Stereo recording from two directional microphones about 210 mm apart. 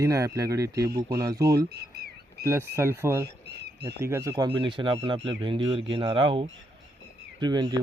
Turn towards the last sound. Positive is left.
turn(degrees=-20)  # may be behind; listen again after turning